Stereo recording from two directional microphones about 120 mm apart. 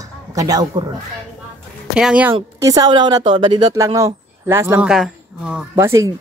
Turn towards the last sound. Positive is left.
turn(degrees=-25)  # may be behind; listen again after turning